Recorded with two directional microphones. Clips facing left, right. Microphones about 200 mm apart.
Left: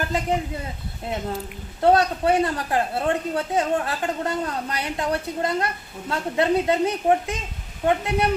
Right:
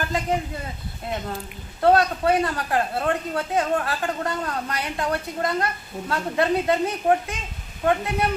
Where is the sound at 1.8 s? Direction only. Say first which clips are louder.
Even; 25° left (ahead or behind).